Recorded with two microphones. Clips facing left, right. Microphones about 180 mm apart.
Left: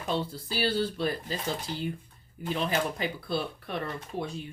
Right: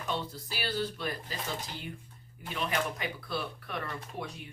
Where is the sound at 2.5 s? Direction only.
30° left (ahead or behind).